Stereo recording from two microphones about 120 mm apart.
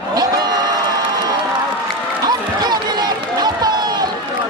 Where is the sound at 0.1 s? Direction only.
35° right (ahead or behind).